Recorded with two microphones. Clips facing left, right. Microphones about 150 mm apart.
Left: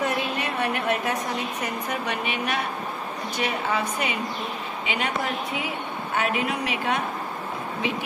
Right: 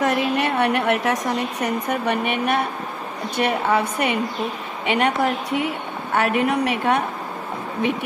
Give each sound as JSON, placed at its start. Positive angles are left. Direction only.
{"t": 0.0, "sound": "a woman's voice", "side_deg": -75}
{"t": 6.1, "sound": "a woman's voice", "side_deg": -60}